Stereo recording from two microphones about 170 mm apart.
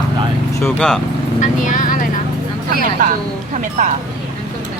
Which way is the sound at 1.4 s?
50° left (ahead or behind).